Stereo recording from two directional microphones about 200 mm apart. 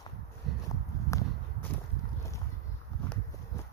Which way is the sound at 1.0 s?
15° left (ahead or behind).